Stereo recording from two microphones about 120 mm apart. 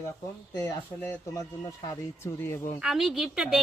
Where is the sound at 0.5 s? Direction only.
25° left (ahead or behind).